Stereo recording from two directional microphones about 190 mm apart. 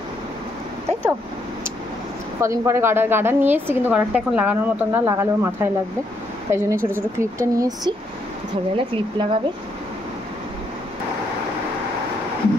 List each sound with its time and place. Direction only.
2.4 s a woman's voice: 15° right (ahead or behind)